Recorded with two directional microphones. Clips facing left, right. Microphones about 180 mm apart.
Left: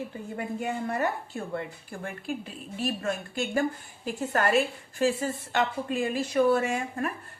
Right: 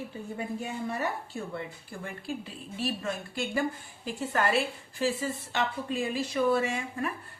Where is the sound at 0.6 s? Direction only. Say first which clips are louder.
Left 6 dB; 50° left (ahead or behind).